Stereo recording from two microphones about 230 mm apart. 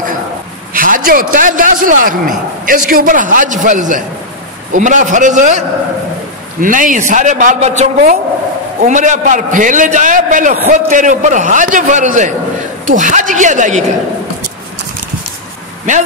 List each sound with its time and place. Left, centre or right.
0.7 s a man's voice: right